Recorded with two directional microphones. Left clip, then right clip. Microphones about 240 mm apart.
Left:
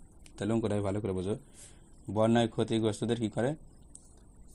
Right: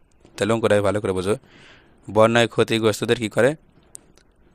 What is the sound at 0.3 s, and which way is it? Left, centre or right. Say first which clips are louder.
A man's voice: right 14 dB; right.